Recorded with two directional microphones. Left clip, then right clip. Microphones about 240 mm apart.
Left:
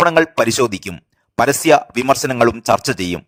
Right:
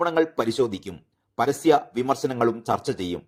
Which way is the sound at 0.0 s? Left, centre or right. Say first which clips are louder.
Left 9 dB; left.